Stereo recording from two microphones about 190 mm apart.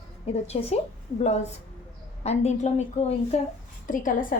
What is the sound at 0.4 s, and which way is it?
A woman's voice, 35° left (ahead or behind).